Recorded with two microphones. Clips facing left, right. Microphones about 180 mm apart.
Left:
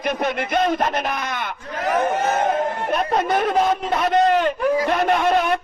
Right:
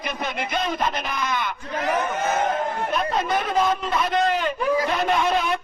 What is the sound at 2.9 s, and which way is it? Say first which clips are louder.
Speech: left 4 dB; 55° left (ahead or behind).